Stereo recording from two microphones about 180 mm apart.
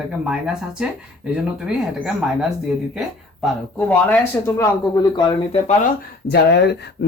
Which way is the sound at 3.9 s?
10° left (ahead or behind).